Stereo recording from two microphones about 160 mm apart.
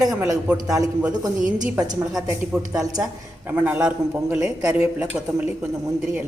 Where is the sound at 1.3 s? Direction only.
55° right (ahead or behind).